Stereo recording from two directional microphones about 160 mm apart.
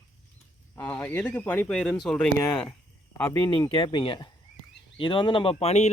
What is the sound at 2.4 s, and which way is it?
Speech, 20° left (ahead or behind).